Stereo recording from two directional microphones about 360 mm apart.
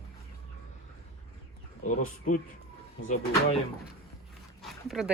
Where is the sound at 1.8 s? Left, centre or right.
Left.